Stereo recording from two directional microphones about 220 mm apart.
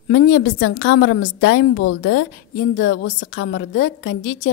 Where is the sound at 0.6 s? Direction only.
55° left (ahead or behind).